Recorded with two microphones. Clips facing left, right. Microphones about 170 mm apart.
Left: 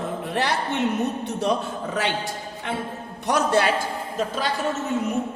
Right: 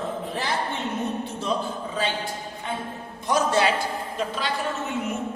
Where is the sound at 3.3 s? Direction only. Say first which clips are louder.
Left 1 dB; 60° left (ahead or behind).